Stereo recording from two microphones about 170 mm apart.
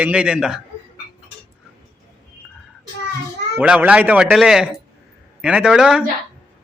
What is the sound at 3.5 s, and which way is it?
Speech, 10° right (ahead or behind).